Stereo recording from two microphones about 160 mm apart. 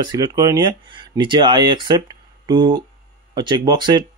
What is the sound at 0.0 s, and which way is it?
Speech, 25° right (ahead or behind).